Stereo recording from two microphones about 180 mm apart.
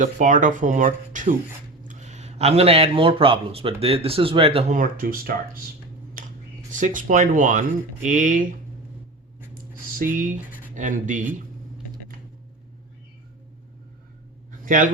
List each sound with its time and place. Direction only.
0.0 s speech: 45° right (ahead or behind)
4.7 s speech: 50° right (ahead or behind)
6.2 s a sound: 50° right (ahead or behind)
6.7 s speech: 45° right (ahead or behind)
10.0 s speech: 45° right (ahead or behind)
14.6 s dog: 50° right (ahead or behind)